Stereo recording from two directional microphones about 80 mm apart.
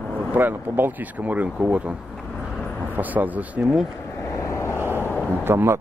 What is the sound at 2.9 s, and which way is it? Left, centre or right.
Speech, right.